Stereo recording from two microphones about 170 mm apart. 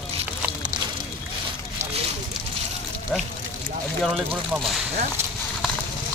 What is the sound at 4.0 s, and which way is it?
Speech, centre (ahead or behind).